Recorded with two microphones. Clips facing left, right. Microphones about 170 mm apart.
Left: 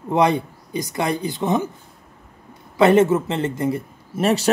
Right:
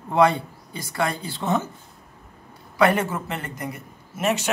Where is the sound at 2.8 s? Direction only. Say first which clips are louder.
Left 6 dB; 25° left (ahead or behind).